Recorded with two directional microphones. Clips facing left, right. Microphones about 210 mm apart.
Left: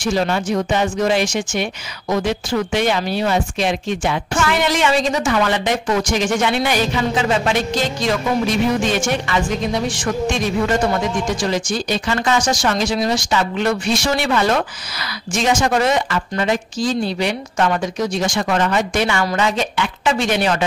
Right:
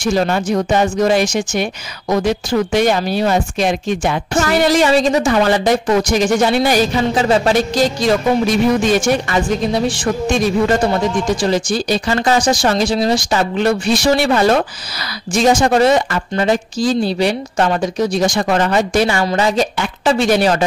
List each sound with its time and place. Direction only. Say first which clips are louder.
0.0 s speech: right 3 dB; 45° right (ahead or behind)